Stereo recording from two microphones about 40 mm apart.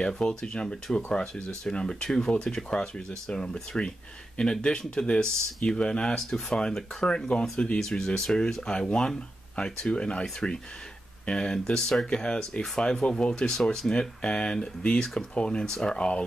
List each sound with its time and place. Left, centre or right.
0.0 s speech: left
11.2 s speech: left
13.3 s speech: centre